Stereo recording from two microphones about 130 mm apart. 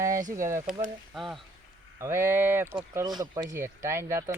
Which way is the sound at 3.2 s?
30° right (ahead or behind).